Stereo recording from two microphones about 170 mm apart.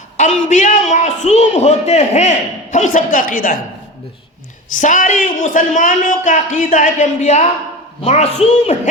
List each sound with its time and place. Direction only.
0.2 s speech: 45° left (ahead or behind)
4.7 s speech: 50° left (ahead or behind)